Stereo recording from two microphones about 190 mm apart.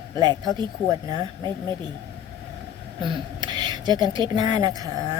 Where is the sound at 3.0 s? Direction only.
25° right (ahead or behind).